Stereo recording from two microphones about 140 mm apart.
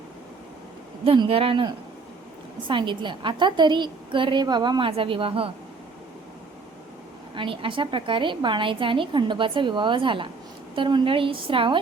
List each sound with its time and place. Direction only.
1.0 s a woman's voice: 40° right (ahead or behind)
7.3 s a woman's voice: 40° right (ahead or behind)